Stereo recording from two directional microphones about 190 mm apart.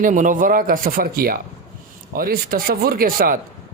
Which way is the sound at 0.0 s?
45° right (ahead or behind).